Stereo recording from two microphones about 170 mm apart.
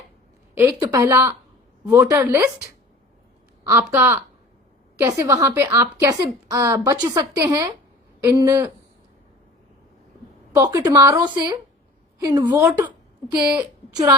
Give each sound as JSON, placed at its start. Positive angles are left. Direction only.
{"t": 0.5, "sound": "a woman's voice", "side_deg": -15}
{"t": 3.7, "sound": "a woman's voice", "side_deg": -10}
{"t": 10.5, "sound": "a woman's voice", "side_deg": -20}
{"t": 12.5, "sound": "a woman's voice", "side_deg": -15}
{"t": 13.9, "sound": "a woman's voice", "side_deg": -20}